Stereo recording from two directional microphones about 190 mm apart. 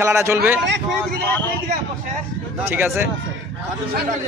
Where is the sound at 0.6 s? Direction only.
65° right (ahead or behind).